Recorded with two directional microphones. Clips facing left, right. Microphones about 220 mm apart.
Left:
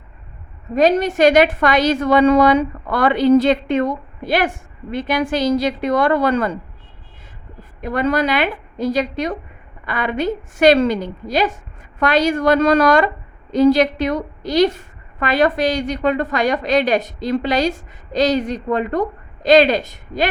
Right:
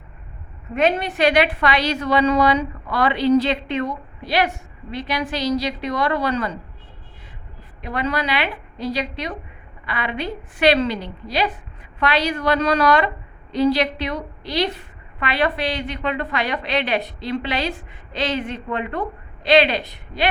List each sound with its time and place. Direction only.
0.7 s a woman's voice: 40° left (ahead or behind)
7.8 s a woman's voice: 45° left (ahead or behind)